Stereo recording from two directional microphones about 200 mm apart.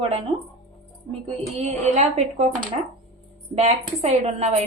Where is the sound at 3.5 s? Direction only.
30° right (ahead or behind).